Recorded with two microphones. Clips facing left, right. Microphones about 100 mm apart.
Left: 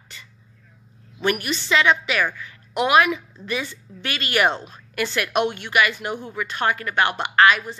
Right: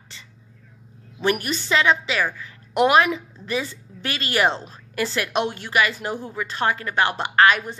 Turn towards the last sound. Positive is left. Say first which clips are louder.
# even
turn(degrees=-40)  # may be behind; listen again after turning